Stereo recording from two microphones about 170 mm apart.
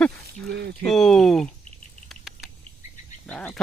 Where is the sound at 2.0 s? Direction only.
Centre (ahead or behind).